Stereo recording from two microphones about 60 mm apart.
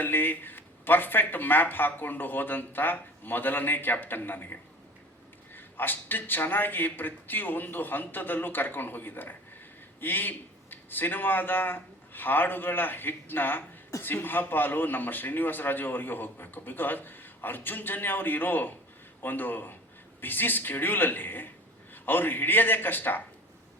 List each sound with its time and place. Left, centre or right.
0.0 s a man's voice: left
5.5 s a man's voice: left